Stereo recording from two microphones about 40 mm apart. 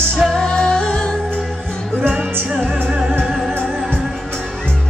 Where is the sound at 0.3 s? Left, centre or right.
Centre.